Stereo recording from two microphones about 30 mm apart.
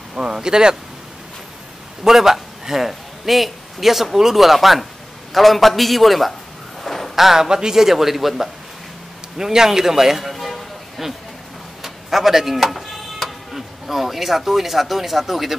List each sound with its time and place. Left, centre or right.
0.1 s speech: right
2.0 s speech: centre
2.9 s a man's voice: centre
6.8 s a sound: centre
7.2 s speech: centre
7.4 s speech: right
7.7 s speech: centre
9.4 s speech: centre
10.3 s music: centre
11.8 s speech: centre